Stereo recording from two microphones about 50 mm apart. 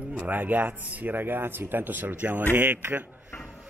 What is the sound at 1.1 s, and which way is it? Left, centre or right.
Speech, right.